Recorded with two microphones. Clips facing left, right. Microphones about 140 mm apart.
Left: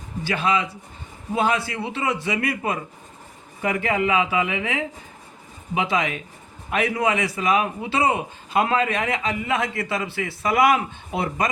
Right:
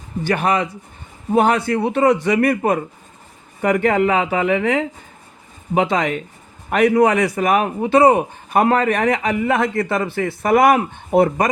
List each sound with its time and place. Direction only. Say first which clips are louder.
0.3 s a man's voice: right 4 dB; 50° right (ahead or behind)